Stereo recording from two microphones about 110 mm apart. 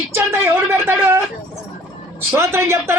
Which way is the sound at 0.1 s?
25° right (ahead or behind).